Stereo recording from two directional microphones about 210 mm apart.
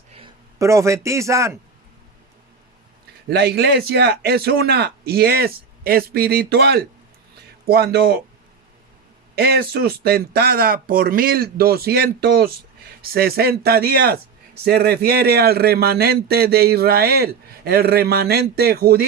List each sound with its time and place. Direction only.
0.6 s a man's voice: 15° right (ahead or behind)
3.2 s a man's voice: 50° right (ahead or behind)
9.3 s a man's voice: 50° right (ahead or behind)